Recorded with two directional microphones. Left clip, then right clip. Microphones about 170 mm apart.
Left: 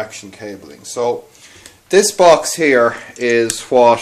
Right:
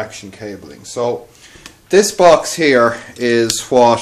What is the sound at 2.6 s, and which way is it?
Speech, centre (ahead or behind).